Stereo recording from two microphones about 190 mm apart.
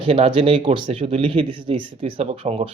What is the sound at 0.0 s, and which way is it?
Speech, 30° right (ahead or behind).